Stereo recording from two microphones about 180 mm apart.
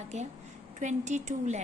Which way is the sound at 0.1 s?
40° right (ahead or behind).